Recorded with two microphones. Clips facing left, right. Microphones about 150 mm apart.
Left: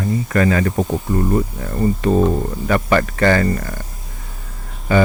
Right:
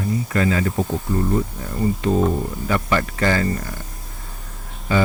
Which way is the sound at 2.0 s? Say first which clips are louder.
Left 3 dB; 55° left (ahead or behind).